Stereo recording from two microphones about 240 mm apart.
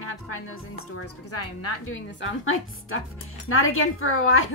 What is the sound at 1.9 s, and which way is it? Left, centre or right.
A woman's voice, left.